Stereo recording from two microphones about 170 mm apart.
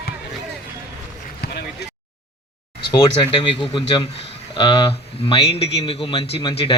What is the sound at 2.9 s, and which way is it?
A man's voice, 30° left (ahead or behind).